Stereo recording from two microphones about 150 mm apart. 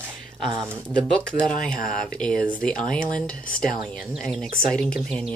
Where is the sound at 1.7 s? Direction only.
65° left (ahead or behind).